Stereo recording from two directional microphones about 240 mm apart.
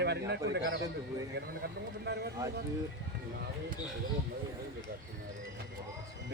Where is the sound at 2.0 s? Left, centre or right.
Right.